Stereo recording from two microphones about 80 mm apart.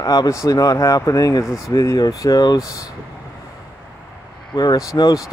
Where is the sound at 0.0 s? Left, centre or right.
Left.